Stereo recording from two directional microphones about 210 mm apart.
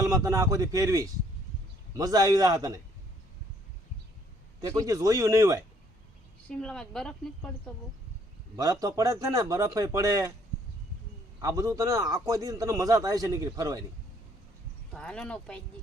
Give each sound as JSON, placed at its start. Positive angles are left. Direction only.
{"t": 0.0, "sound": "a man's voice", "side_deg": -15}
{"t": 4.6, "sound": "a man's voice", "side_deg": -15}
{"t": 6.5, "sound": "a woman's voice", "side_deg": 5}
{"t": 8.5, "sound": "a man's voice", "side_deg": -15}
{"t": 11.3, "sound": "a man's voice", "side_deg": -15}
{"t": 14.9, "sound": "a woman's voice", "side_deg": 5}